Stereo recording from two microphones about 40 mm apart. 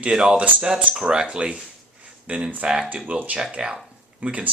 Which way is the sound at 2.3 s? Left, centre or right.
Right.